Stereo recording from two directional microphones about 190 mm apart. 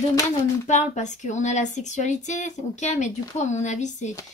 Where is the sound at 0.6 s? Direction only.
40° left (ahead or behind).